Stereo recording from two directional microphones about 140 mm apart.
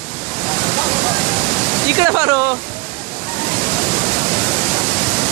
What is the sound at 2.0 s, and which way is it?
Speech, 20° right (ahead or behind).